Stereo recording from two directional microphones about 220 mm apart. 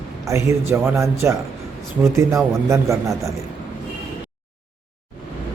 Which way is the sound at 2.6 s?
15° right (ahead or behind).